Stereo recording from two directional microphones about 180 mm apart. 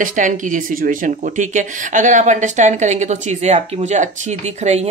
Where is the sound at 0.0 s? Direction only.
45° right (ahead or behind).